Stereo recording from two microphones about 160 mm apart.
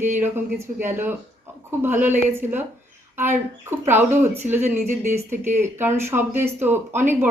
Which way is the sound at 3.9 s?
15° right (ahead or behind).